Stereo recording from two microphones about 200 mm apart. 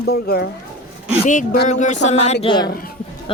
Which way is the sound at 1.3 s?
40° left (ahead or behind).